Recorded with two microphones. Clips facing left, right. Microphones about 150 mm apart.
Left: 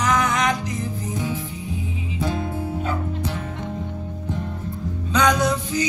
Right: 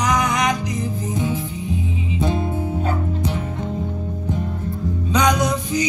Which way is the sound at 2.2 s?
20° right (ahead or behind).